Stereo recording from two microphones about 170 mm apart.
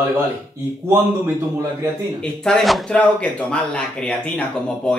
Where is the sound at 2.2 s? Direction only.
5° left (ahead or behind).